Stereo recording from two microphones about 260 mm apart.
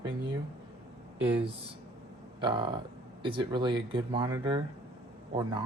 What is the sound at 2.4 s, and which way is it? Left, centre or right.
Speech, centre.